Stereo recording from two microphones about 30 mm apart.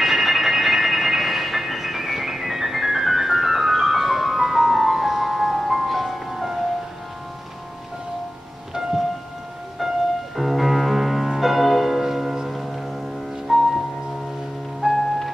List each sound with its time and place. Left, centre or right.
0.0 s train: centre
10.3 s music: centre
14.8 s music: right